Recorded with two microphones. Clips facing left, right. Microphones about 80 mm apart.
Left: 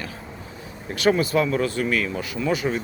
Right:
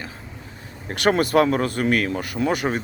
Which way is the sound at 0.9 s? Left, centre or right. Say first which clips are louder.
Right 1 dB; right.